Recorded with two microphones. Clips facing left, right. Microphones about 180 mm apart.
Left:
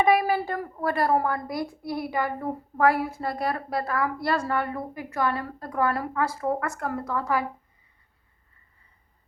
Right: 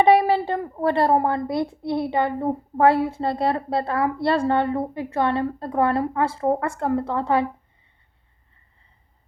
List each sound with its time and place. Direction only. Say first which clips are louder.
0.0 s speech: right 5 dB; 25° right (ahead or behind)